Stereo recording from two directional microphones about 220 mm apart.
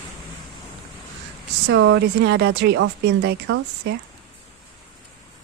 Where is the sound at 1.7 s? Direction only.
60° right (ahead or behind).